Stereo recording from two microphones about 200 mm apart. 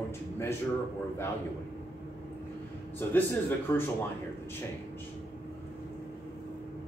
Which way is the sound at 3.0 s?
10° left (ahead or behind).